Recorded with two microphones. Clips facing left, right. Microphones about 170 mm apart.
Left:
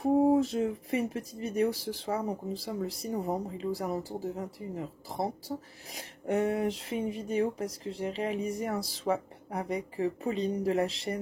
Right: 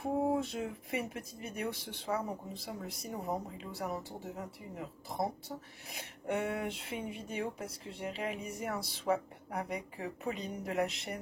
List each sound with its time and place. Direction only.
0.2 s speech: 35° left (ahead or behind)